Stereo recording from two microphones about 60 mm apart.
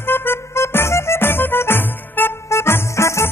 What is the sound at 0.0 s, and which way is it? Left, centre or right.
Music, left.